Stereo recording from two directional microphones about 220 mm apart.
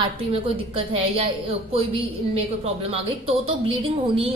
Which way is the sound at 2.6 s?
25° right (ahead or behind).